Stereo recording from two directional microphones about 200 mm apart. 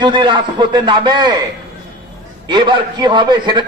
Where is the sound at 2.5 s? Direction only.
25° right (ahead or behind).